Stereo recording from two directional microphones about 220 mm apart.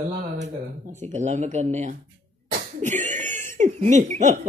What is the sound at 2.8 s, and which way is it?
Cough, 35° right (ahead or behind).